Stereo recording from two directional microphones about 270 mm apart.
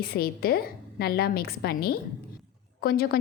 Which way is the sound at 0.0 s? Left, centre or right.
Left.